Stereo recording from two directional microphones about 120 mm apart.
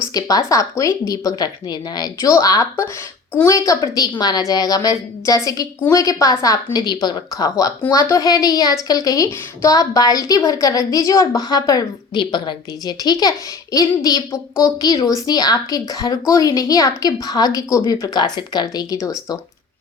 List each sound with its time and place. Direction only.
0.1 s a woman's voice: 30° left (ahead or behind)